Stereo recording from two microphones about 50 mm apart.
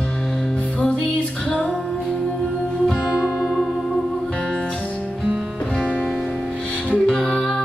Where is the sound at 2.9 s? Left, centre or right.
Centre.